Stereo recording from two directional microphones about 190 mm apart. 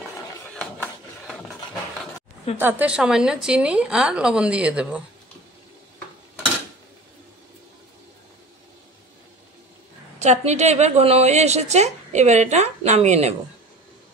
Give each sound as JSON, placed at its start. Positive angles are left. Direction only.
{"t": 2.5, "sound": "a woman's voice", "side_deg": -10}
{"t": 10.1, "sound": "a woman's voice", "side_deg": -35}